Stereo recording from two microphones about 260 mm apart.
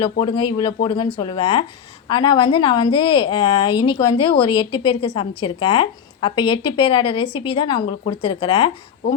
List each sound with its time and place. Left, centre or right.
0.0 s a woman's voice: centre